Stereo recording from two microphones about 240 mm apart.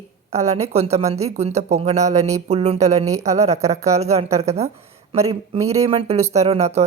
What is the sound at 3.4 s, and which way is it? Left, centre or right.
Speech, centre.